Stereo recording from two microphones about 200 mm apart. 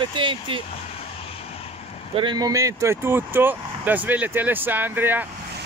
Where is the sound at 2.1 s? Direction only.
20° right (ahead or behind).